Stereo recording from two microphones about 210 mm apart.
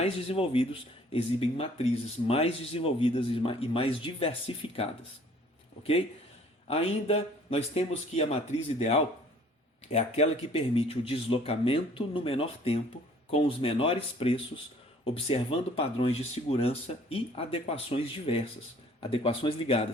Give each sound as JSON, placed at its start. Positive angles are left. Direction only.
{"t": 0.0, "sound": "speech", "side_deg": 25}
{"t": 6.7, "sound": "speech", "side_deg": 30}
{"t": 9.9, "sound": "speech", "side_deg": 30}